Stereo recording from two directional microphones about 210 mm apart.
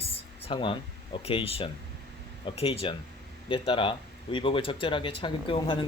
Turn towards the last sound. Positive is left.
turn(degrees=25)  # may be behind; listen again after turning